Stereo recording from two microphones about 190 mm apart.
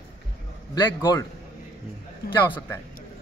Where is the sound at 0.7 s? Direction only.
20° left (ahead or behind).